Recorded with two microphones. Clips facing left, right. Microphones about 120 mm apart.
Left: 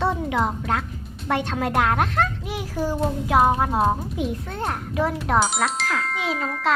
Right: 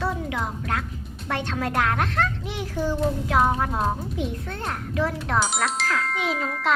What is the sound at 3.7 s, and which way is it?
Speech, 30° left (ahead or behind).